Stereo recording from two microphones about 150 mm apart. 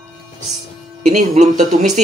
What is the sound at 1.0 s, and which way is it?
Speech, 55° right (ahead or behind).